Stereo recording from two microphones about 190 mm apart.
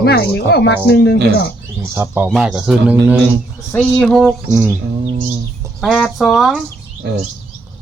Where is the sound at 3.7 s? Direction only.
5° left (ahead or behind).